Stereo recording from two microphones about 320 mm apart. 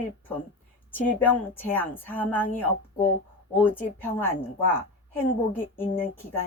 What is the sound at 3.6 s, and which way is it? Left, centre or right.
A woman's voice, centre.